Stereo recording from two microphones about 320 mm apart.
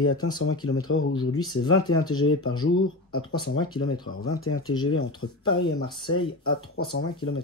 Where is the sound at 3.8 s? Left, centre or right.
Left.